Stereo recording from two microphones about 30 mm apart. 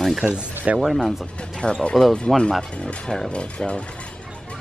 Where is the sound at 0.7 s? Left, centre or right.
Right.